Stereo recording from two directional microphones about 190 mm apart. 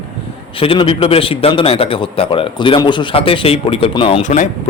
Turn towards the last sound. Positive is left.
turn(degrees=40)  # may be behind; listen again after turning